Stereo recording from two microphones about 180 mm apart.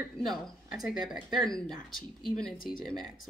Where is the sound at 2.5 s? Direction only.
55° left (ahead or behind).